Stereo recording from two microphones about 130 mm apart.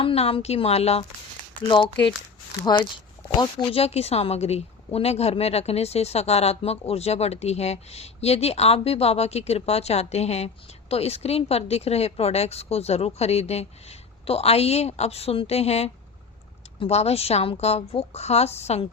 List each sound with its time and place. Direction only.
0.0 s a woman's voice: 45° left (ahead or behind)
1.6 s speech: 40° left (ahead or behind)
3.8 s a woman's voice: 50° left (ahead or behind)